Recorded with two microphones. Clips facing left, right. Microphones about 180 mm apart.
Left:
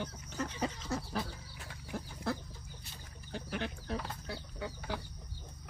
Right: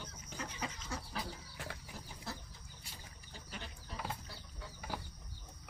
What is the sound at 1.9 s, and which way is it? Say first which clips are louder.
Bird: left 10 dB; 55° left (ahead or behind).